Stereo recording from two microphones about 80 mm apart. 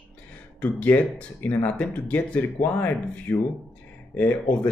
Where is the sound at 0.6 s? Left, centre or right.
Left.